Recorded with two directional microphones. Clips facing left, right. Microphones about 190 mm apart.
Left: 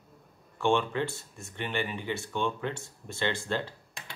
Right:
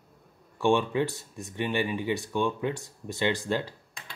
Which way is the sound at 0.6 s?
15° right (ahead or behind).